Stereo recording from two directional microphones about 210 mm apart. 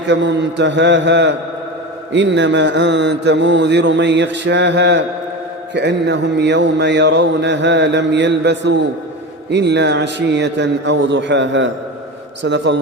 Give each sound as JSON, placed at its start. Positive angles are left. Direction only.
{"t": 0.1, "sound": "mantra", "side_deg": -60}